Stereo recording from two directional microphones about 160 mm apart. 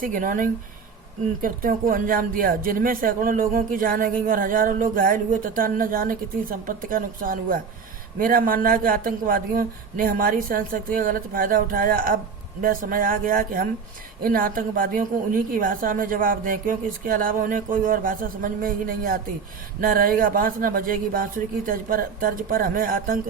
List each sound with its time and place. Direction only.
0.0 s speech: 60° right (ahead or behind)